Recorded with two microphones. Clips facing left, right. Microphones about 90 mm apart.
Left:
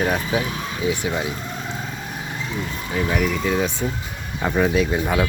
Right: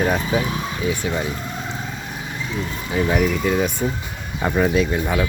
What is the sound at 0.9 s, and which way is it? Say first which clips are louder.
Speech: even; 15° left (ahead or behind).